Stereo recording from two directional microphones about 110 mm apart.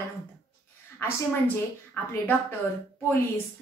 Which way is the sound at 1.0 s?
20° left (ahead or behind).